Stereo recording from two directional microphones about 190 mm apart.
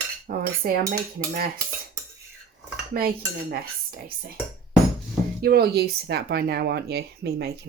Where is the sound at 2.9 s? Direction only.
50° right (ahead or behind).